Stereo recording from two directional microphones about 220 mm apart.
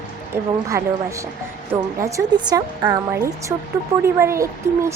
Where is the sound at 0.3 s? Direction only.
10° right (ahead or behind).